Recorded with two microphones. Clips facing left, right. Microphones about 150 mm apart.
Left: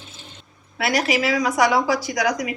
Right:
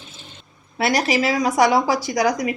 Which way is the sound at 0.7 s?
35° right (ahead or behind).